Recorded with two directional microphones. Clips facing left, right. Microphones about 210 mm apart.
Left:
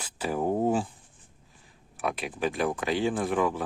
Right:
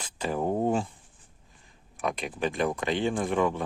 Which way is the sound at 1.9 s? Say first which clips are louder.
Even; 5° left (ahead or behind).